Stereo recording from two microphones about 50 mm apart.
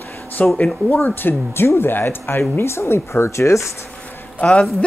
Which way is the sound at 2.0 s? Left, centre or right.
Left.